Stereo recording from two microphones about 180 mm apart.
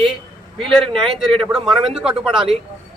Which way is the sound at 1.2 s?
Centre (ahead or behind).